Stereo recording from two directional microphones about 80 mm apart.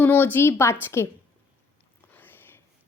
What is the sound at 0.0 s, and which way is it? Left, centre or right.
A woman's voice, left.